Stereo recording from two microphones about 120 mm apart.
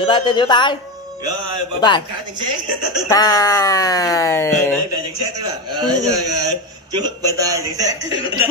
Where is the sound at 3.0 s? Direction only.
30° left (ahead or behind).